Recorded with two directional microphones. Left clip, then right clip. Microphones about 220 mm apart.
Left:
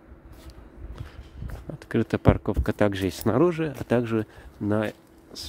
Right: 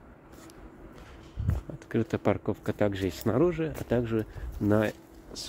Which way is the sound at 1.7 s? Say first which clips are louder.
Left 4 dB; 25° left (ahead or behind).